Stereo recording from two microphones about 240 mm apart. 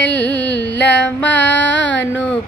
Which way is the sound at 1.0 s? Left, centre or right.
Centre.